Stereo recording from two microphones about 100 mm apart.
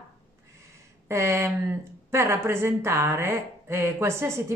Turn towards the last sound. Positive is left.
turn(degrees=-25)  # may be behind; listen again after turning